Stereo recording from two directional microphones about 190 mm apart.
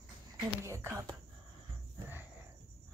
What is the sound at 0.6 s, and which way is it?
Speech, 15° right (ahead or behind).